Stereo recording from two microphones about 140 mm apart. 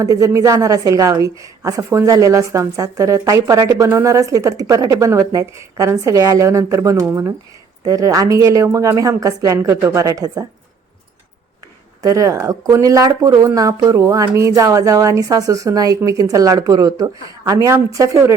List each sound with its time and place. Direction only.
0.0 s a woman's voice: 25° right (ahead or behind)
12.0 s a woman's voice: 25° right (ahead or behind)